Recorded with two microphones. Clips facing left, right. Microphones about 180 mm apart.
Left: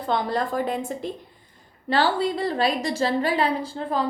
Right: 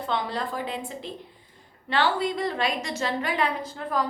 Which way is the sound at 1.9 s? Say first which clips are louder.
Left 3 dB; 35° left (ahead or behind).